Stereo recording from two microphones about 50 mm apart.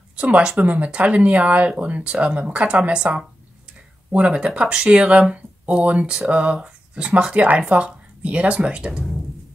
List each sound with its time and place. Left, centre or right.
0.1 s speech: right